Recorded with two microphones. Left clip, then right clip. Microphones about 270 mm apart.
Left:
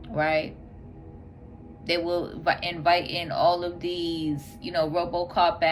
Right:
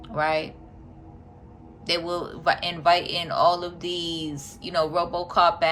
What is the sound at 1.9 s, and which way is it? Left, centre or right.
Speech, centre.